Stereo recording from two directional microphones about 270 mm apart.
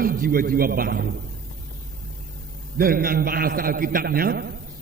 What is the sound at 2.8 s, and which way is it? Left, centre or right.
A man's voice, right.